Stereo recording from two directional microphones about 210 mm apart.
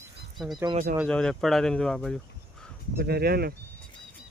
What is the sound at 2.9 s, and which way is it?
Speech, 50° right (ahead or behind).